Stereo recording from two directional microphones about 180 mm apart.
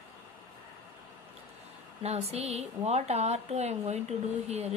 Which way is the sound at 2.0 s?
35° right (ahead or behind).